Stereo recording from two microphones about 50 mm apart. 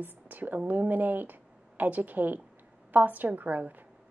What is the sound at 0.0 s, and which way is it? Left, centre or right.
A woman's voice, right.